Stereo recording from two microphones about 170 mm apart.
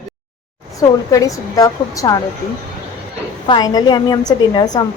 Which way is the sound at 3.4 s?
25° left (ahead or behind).